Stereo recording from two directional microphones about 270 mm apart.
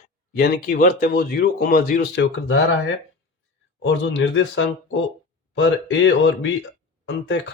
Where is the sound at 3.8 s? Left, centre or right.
Left.